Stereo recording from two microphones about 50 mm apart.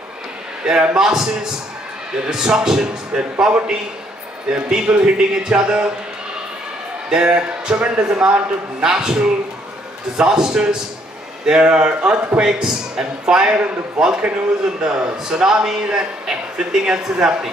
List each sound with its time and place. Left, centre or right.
0.7 s a man's voice: centre
7.1 s a man's voice: centre